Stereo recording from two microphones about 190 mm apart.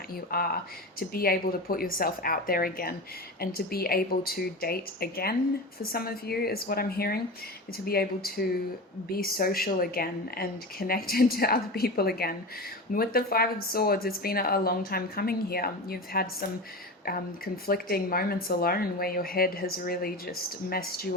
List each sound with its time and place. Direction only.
0.3 s speech: 50° left (ahead or behind)